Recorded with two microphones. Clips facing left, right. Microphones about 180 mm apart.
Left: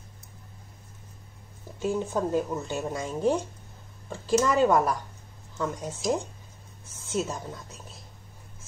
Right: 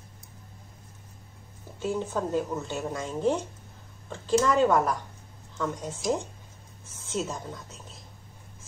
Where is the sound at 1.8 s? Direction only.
15° left (ahead or behind).